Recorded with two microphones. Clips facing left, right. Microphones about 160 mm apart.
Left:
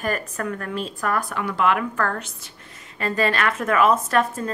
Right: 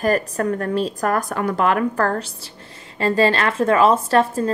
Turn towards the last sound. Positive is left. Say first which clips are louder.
# right 5 dB
turn(degrees=-30)  # may be behind; listen again after turning